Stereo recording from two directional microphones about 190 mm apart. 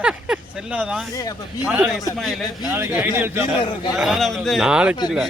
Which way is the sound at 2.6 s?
10° right (ahead or behind).